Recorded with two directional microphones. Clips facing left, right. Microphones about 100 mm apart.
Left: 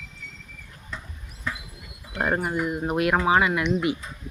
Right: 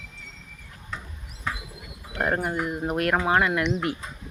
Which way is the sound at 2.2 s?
5° left (ahead or behind).